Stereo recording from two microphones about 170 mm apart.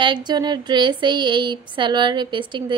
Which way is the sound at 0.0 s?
25° right (ahead or behind).